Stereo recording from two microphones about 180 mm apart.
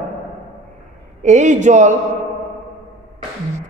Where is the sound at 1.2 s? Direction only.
40° right (ahead or behind).